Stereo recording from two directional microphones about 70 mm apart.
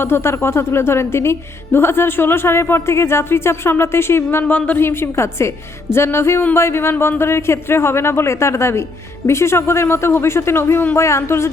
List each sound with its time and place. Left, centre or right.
0.0 s speech: left
4.5 s speech: left
4.8 s speech: left